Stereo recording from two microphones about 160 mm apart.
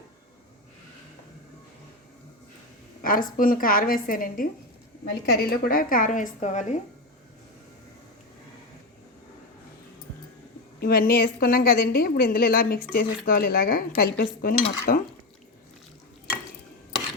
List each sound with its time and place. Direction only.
3.0 s cutlery: 60° left (ahead or behind)
5.2 s cutlery: 75° left (ahead or behind); by 6.2 s 55° left (ahead or behind)
6.4 s speech: 45° left (ahead or behind)
10.8 s a woman's voice: 70° left (ahead or behind)
12.9 s cutlery: 65° left (ahead or behind)